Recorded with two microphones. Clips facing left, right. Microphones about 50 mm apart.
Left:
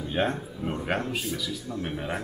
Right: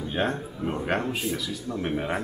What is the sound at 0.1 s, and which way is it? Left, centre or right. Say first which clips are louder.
Speech: left 1 dB; centre.